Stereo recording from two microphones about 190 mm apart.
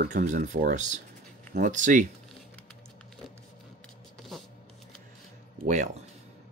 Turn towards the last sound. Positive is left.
turn(degrees=-40)  # may be behind; listen again after turning